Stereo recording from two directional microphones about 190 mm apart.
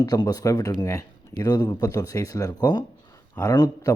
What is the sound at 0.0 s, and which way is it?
Speech, 20° left (ahead or behind).